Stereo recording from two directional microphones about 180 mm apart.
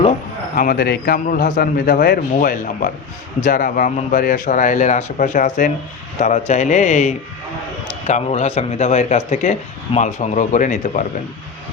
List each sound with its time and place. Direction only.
0.5 s a man's voice: 50° left (ahead or behind)